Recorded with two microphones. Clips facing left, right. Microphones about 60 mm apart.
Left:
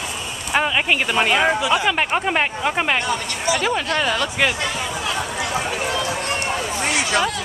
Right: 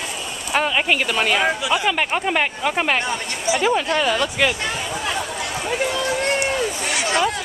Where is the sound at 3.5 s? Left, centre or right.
Centre.